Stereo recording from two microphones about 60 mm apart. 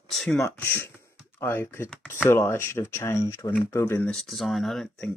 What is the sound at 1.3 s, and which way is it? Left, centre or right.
Speech, left.